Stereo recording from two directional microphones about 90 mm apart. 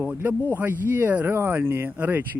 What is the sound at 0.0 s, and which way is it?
Speech, 25° right (ahead or behind).